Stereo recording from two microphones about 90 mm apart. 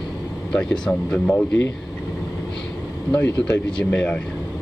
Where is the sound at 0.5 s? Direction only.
10° left (ahead or behind).